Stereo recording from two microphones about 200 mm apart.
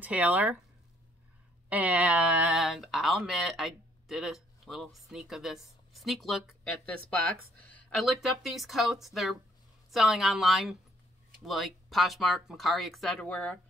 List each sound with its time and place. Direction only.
0.0 s speech: 10° right (ahead or behind)
1.7 s speech: 5° right (ahead or behind)